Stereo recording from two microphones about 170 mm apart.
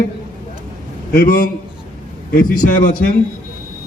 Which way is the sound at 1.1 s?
60° left (ahead or behind).